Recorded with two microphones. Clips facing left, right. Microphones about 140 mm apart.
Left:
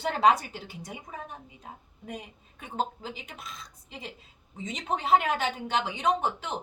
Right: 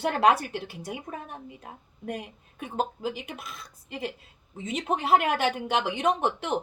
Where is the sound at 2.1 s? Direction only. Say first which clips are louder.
Right 5 dB; 60° right (ahead or behind).